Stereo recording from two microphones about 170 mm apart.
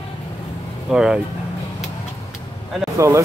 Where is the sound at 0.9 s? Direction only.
5° right (ahead or behind).